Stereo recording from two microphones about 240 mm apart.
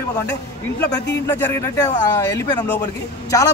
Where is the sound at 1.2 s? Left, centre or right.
Centre.